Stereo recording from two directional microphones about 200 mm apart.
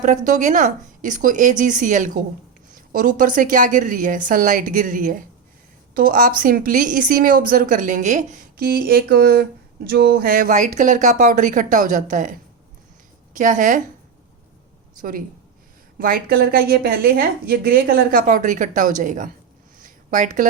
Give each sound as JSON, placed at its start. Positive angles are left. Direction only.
{"t": 0.3, "sound": "a woman's voice", "side_deg": -40}
{"t": 16.0, "sound": "a woman's voice", "side_deg": -45}
{"t": 19.8, "sound": "a sound", "side_deg": -40}